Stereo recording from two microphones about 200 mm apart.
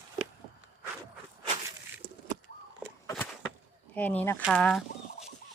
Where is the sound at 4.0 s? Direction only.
10° left (ahead or behind).